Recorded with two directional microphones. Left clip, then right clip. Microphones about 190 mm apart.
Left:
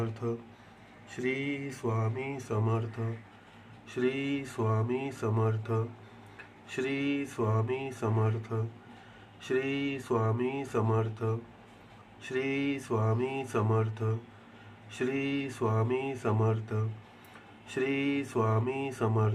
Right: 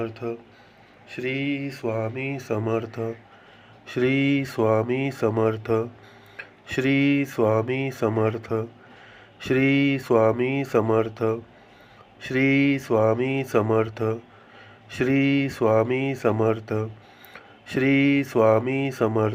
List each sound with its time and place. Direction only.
0.0 s speech: 15° right (ahead or behind)
1.1 s tick: 15° right (ahead or behind)